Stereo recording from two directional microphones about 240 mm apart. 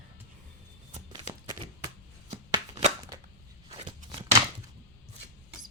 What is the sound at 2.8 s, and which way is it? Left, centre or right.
Cap gun, right.